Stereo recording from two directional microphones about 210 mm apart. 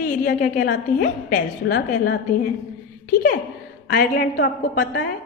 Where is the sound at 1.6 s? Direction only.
55° left (ahead or behind).